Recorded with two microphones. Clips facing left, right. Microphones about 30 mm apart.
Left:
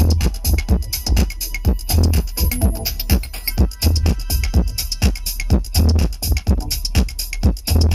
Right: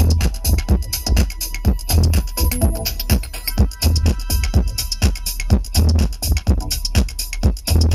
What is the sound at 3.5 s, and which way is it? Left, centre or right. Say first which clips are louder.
Music: even; centre.